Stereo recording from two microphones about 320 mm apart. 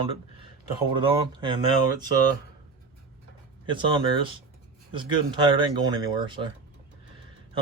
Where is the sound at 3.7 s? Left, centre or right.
Centre.